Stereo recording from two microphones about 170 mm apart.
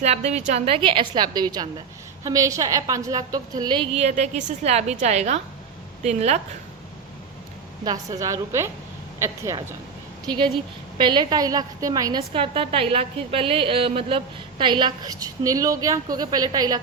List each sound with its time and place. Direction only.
0.0 s a woman's voice: 40° right (ahead or behind)
3.9 s a woman's voice: 40° right (ahead or behind)
7.9 s a woman's voice: 20° right (ahead or behind)
10.2 s a woman's voice: 30° right (ahead or behind)